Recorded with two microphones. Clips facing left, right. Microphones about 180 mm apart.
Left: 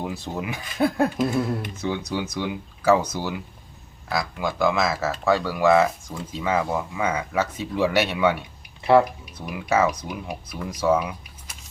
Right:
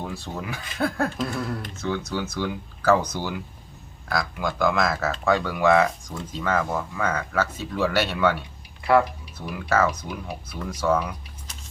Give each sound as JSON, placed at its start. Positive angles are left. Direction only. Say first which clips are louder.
{"t": 0.0, "sound": "speech", "louder": "left 3 dB", "side_deg": 15}
{"t": 8.8, "sound": "speech", "louder": "left 3 dB", "side_deg": 25}
{"t": 9.5, "sound": "speech", "louder": "left 1 dB", "side_deg": 10}